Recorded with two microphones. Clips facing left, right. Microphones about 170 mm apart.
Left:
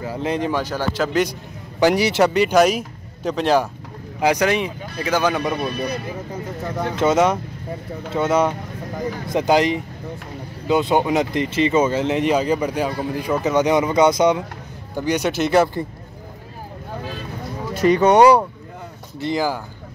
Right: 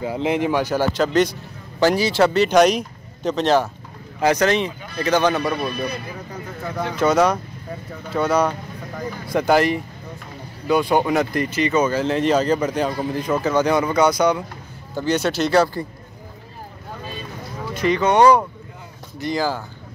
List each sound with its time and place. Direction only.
0.0 s speech: 15° right (ahead or behind)
0.9 s speech: 5° left (ahead or behind)
1.8 s speech: 20° left (ahead or behind)
5.4 s speech: 20° left (ahead or behind)
17.7 s speech: 40° left (ahead or behind)
18.0 s speech: 15° left (ahead or behind)